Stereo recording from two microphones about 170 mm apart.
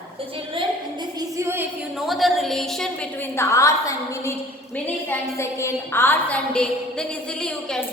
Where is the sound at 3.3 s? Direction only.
15° left (ahead or behind).